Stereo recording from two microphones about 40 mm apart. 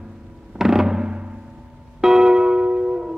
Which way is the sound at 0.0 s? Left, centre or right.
Centre.